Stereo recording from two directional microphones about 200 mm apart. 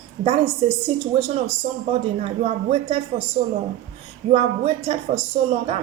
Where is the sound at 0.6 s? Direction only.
30° right (ahead or behind).